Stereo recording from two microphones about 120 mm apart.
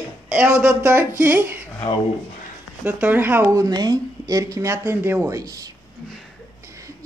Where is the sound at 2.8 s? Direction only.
15° right (ahead or behind).